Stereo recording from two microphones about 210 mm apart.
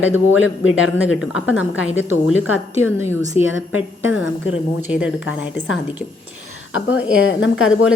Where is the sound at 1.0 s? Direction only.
5° right (ahead or behind).